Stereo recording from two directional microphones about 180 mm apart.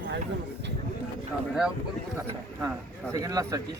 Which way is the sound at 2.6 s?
15° right (ahead or behind).